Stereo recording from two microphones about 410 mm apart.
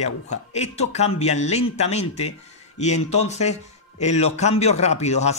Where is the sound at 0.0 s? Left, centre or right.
Centre.